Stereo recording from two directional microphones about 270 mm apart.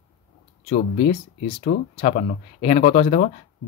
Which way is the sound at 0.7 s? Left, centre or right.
Left.